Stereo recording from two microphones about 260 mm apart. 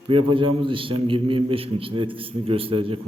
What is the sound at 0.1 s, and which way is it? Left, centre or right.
A man's voice, centre.